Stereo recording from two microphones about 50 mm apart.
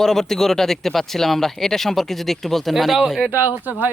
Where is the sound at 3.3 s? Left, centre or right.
Right.